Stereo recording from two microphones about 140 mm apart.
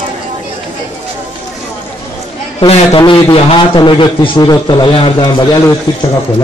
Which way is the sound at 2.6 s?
45° left (ahead or behind).